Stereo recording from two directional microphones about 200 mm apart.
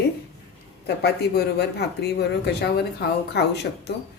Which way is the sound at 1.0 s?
55° left (ahead or behind).